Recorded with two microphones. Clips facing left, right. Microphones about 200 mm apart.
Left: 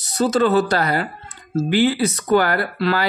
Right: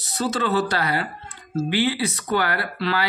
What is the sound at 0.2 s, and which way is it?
A woman's voice, 45° left (ahead or behind).